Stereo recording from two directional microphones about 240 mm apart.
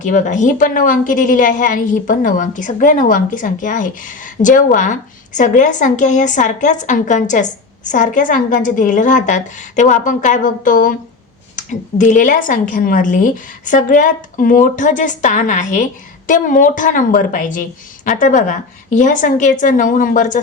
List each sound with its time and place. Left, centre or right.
0.0 s a woman's voice: left